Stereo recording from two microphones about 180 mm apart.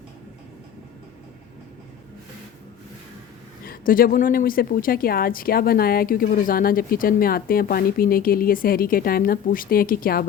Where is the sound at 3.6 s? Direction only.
50° left (ahead or behind).